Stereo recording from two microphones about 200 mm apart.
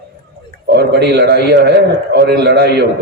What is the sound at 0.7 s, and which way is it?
A man's voice, 55° right (ahead or behind).